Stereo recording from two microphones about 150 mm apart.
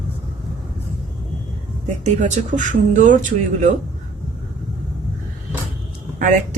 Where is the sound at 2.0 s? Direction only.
55° right (ahead or behind).